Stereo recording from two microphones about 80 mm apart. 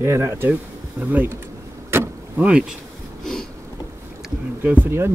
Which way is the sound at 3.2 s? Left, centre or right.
Centre.